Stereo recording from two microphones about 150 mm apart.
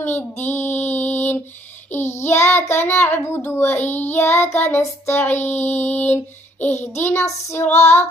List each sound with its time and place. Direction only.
0.5 s music: 15° left (ahead or behind)
2.1 s child singing: 15° left (ahead or behind)
7.8 s child singing: 45° left (ahead or behind)